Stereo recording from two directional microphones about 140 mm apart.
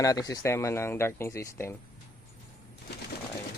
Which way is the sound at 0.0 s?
25° left (ahead or behind).